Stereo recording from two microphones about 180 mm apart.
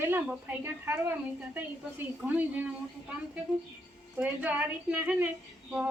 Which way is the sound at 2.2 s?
10° right (ahead or behind).